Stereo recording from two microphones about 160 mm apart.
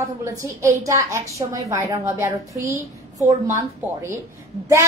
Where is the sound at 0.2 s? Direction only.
20° right (ahead or behind).